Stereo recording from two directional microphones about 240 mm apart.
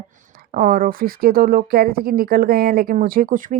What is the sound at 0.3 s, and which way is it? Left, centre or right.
A woman's voice, right.